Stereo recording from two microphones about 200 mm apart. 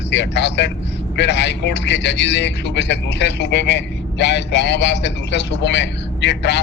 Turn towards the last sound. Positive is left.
turn(degrees=60)  # may be behind; listen again after turning